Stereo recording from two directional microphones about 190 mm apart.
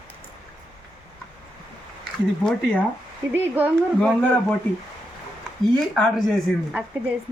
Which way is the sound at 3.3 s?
10° right (ahead or behind).